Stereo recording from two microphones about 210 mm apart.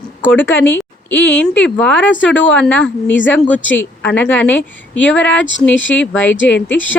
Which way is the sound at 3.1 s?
60° left (ahead or behind).